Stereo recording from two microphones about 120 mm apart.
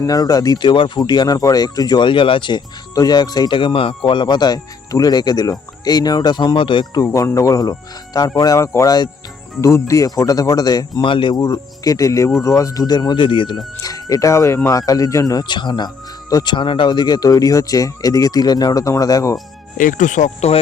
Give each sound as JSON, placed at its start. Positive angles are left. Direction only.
{"t": 0.0, "sound": "speech", "side_deg": 30}
{"t": 7.0, "sound": "speech", "side_deg": 25}
{"t": 13.8, "sound": "speech", "side_deg": 30}
{"t": 19.7, "sound": "speech", "side_deg": 90}